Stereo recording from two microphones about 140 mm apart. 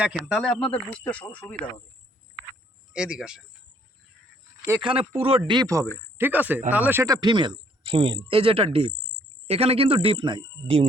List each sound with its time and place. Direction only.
0.0 s speech: 5° right (ahead or behind)
0.7 s speech: 10° left (ahead or behind)
2.9 s speech: 5° right (ahead or behind)
4.8 s speech: 40° right (ahead or behind)
5.4 s speech: 30° right (ahead or behind)
6.1 s speech: 15° right (ahead or behind)
7.1 s speech: 30° right (ahead or behind)